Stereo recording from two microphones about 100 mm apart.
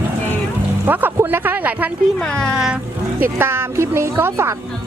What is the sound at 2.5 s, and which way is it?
Speech, 5° right (ahead or behind).